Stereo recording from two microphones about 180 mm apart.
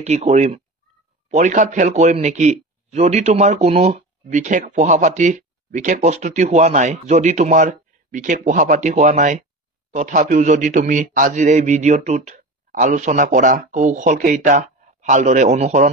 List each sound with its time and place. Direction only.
0.0 s a man's voice: 40° right (ahead or behind)